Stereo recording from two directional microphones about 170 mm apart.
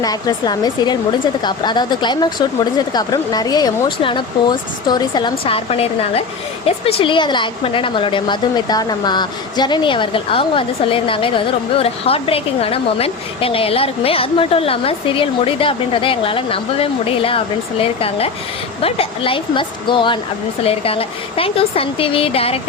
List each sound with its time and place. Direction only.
0.0 s a woman's voice: 25° left (ahead or behind)